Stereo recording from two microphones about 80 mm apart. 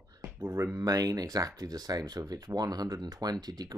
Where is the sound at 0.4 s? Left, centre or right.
Right.